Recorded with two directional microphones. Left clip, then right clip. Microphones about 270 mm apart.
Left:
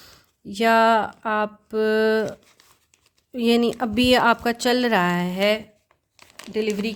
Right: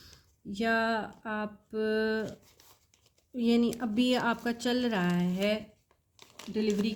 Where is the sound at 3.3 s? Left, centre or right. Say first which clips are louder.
Left 9 dB; left.